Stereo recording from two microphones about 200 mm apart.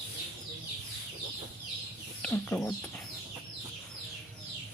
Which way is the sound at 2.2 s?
10° left (ahead or behind).